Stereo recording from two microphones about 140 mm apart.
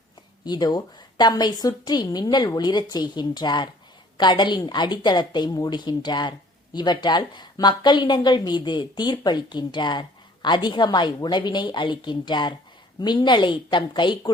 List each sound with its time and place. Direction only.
0.4 s speech: 30° left (ahead or behind)